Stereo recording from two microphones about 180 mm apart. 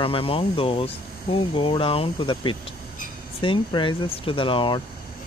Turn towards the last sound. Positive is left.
turn(degrees=30)  # may be behind; listen again after turning